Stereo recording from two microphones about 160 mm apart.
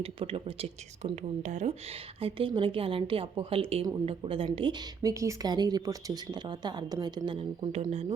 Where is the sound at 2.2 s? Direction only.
30° right (ahead or behind).